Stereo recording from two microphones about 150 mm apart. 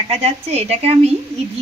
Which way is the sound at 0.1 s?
45° right (ahead or behind).